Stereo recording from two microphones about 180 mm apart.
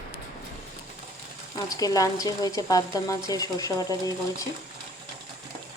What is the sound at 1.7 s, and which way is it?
Speech, 20° left (ahead or behind).